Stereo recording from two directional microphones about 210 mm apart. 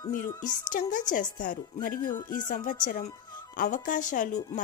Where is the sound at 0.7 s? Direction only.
40° left (ahead or behind).